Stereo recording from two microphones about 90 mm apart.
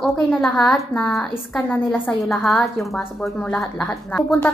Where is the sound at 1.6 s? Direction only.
20° left (ahead or behind).